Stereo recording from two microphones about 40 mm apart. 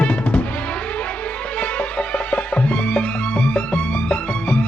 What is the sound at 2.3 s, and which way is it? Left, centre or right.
Music, left.